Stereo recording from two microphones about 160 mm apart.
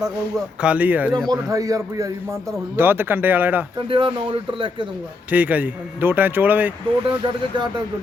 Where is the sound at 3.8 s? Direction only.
35° right (ahead or behind).